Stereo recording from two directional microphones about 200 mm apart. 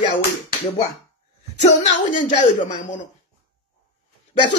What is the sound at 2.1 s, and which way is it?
Speech, 40° left (ahead or behind).